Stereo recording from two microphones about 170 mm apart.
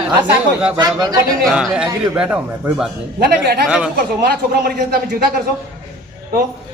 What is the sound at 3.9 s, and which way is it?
Speech, 70° right (ahead or behind).